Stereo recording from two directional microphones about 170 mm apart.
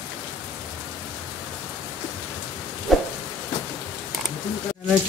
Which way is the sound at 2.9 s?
Centre (ahead or behind).